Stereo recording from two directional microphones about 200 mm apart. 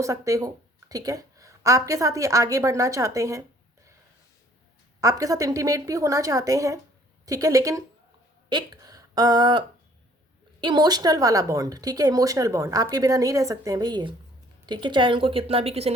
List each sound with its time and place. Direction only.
0.0 s speech: 15° right (ahead or behind)
4.9 s a woman's voice: 15° right (ahead or behind)